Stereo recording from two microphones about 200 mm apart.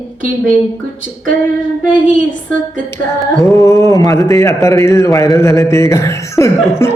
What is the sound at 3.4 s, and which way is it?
A man's voice, 15° left (ahead or behind).